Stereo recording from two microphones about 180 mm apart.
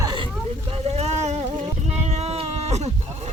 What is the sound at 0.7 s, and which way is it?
Speech, 35° right (ahead or behind).